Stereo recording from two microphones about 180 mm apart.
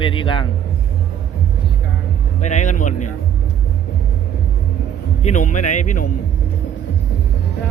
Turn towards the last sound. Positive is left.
turn(degrees=45)  # may be behind; listen again after turning